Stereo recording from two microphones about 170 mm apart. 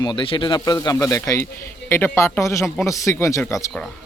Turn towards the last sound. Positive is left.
turn(degrees=20)  # may be behind; listen again after turning